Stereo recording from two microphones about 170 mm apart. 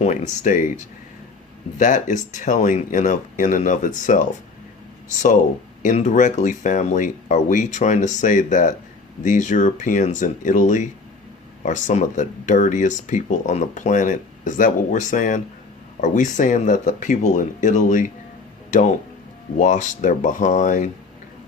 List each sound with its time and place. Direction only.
0.0 s speech: 45° left (ahead or behind)
1.8 s speech: 50° left (ahead or behind)
5.8 s speech: 45° left (ahead or behind)